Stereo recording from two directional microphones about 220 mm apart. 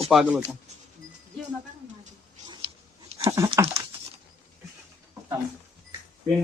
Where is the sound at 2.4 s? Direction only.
20° right (ahead or behind).